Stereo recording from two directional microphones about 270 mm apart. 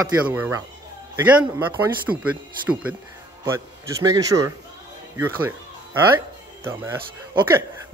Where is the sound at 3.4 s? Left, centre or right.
Centre.